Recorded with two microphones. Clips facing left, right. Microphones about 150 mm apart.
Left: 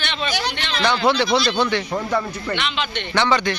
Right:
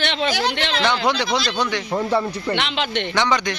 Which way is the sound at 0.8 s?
20° right (ahead or behind).